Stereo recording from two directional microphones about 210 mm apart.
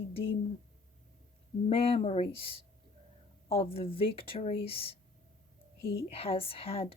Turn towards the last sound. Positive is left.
turn(degrees=25)  # may be behind; listen again after turning